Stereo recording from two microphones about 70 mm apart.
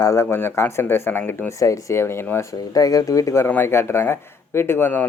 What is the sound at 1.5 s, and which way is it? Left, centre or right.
Speech, left.